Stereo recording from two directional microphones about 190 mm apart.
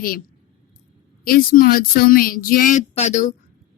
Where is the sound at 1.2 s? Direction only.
50° left (ahead or behind).